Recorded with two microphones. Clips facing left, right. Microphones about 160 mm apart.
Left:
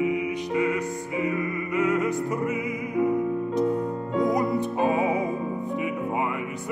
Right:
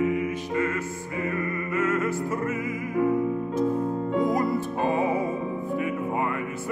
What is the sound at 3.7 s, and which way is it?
Music, centre (ahead or behind).